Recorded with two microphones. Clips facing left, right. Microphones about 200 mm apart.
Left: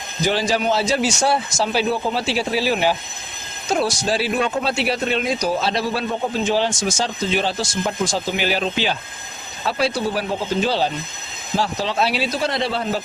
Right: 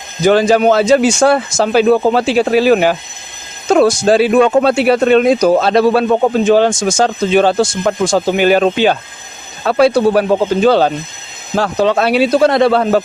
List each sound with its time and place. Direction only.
0.3 s speech: 55° right (ahead or behind)